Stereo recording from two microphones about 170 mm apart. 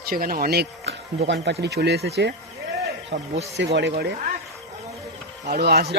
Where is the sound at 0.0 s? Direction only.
60° right (ahead or behind).